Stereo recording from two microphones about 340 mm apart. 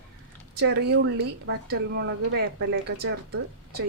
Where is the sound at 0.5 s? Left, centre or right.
Right.